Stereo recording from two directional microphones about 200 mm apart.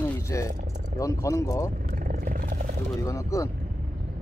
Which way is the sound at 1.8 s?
45° right (ahead or behind).